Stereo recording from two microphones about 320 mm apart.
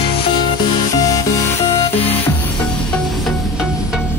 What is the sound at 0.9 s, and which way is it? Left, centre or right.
Music, centre.